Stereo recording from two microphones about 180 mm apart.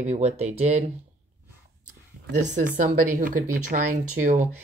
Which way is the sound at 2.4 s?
45° right (ahead or behind).